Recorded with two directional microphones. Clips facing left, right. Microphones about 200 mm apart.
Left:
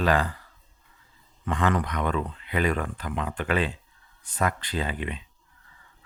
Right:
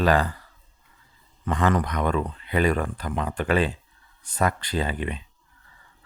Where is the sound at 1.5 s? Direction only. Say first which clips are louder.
Right 2 dB; 40° right (ahead or behind).